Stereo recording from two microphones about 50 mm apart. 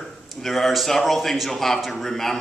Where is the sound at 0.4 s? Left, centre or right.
Centre.